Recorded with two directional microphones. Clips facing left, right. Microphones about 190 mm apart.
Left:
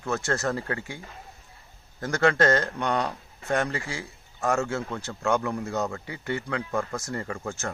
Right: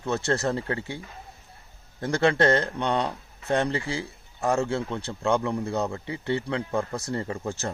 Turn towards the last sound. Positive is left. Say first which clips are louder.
# right 3 dB
turn(degrees=-20)  # may be behind; listen again after turning